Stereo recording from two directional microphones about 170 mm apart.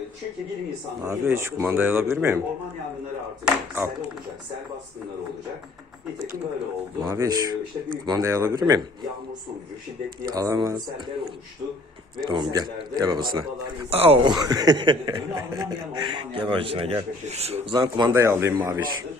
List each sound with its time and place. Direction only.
1.0 s speech: 15° right (ahead or behind)
3.4 s speech: 15° right (ahead or behind)
7.0 s speech: 25° right (ahead or behind)
10.3 s speech: 20° right (ahead or behind)
12.1 s speech: 25° right (ahead or behind)
14.3 s speech: 20° right (ahead or behind)
18.1 s speech: 15° right (ahead or behind)